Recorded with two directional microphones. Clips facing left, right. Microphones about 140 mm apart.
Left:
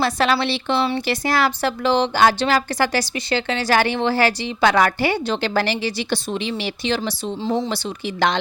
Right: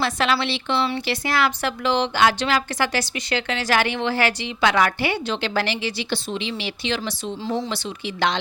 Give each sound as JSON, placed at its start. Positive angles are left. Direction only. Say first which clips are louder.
{"t": 0.0, "sound": "a woman's voice", "louder": "left 3 dB", "side_deg": 40}